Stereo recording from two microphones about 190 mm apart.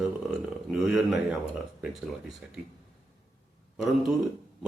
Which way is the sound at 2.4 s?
5° right (ahead or behind).